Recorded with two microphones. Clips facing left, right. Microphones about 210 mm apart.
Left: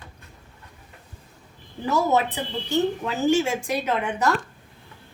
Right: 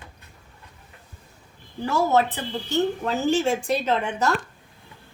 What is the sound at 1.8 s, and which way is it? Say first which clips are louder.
A woman's voice: right 1 dB; 15° left (ahead or behind).